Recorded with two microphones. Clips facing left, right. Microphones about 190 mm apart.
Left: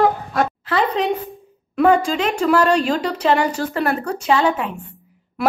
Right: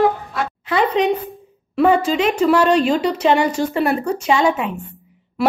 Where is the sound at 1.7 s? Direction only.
5° right (ahead or behind).